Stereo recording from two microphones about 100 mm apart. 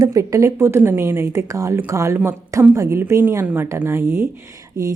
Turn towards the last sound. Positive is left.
turn(degrees=-35)  # may be behind; listen again after turning